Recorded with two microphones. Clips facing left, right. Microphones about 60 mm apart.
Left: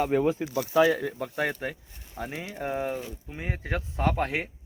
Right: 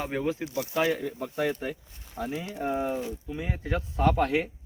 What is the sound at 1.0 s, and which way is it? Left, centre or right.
Speech, left.